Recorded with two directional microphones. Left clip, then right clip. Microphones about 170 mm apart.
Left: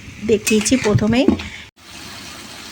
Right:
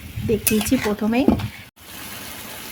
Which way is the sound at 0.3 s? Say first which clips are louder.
Left 5 dB; 20° left (ahead or behind).